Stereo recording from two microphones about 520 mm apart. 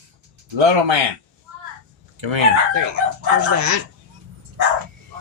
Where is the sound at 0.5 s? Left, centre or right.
Right.